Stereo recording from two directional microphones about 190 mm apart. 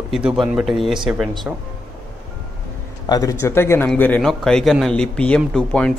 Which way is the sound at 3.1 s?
15° left (ahead or behind).